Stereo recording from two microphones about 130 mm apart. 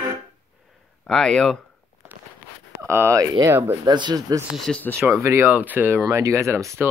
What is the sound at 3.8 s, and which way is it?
Speech, 35° right (ahead or behind).